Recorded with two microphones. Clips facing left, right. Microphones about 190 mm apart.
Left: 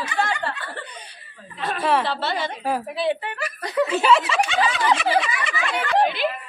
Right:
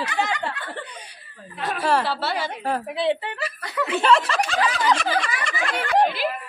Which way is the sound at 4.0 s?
Centre (ahead or behind).